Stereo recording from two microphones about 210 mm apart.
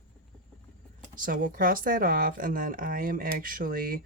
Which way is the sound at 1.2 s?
40° right (ahead or behind).